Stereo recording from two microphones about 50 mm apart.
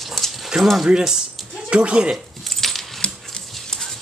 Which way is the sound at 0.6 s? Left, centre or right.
Centre.